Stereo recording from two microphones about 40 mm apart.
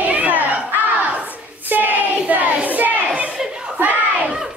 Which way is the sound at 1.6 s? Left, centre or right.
Right.